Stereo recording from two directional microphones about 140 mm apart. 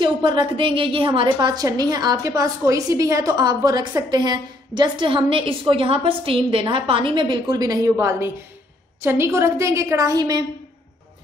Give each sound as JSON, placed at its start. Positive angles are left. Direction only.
{"t": 0.0, "sound": "a woman's voice", "side_deg": -35}